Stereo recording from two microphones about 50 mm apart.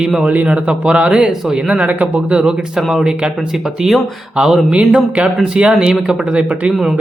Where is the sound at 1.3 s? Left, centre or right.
Centre.